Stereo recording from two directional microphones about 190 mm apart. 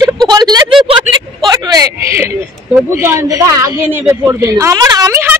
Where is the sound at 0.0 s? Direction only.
20° right (ahead or behind).